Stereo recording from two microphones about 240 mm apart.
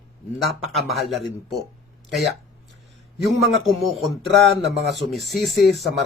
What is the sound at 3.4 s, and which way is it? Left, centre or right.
Speech, centre.